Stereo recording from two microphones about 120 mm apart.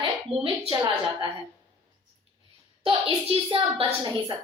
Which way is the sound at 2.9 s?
45° right (ahead or behind).